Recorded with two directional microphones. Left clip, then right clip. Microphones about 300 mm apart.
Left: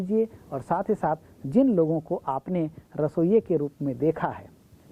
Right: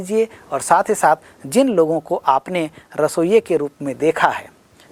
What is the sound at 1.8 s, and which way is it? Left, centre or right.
Speech, right.